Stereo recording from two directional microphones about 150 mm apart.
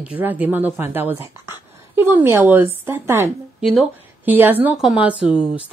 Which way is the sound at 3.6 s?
Centre (ahead or behind).